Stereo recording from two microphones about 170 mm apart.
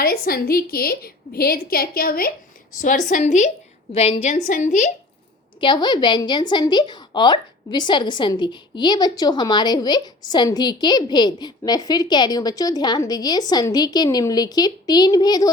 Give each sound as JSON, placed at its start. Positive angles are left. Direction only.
{"t": 0.0, "sound": "a woman's voice", "side_deg": 60}
{"t": 2.8, "sound": "a woman's voice", "side_deg": 50}
{"t": 5.5, "sound": "a woman's voice", "side_deg": 25}